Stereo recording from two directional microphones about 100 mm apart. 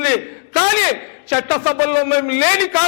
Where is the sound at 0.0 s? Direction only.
20° left (ahead or behind).